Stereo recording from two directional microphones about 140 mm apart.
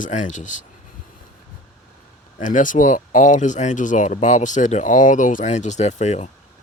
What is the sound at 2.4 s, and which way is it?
Speech, 65° left (ahead or behind).